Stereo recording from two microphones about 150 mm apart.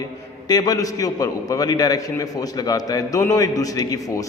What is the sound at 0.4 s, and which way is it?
A man's voice, 25° left (ahead or behind).